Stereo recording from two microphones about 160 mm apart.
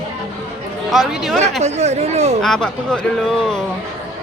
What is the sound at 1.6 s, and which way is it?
Speech, 45° right (ahead or behind).